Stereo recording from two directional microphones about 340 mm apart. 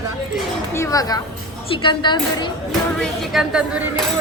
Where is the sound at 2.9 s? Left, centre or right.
Centre.